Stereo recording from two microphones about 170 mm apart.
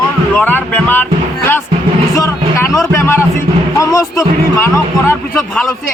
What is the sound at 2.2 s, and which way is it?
Vehicle, 15° left (ahead or behind).